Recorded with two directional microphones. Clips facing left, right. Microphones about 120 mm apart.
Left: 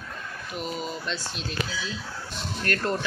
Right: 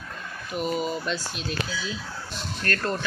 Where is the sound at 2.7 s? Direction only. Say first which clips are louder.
Even; 15° left (ahead or behind).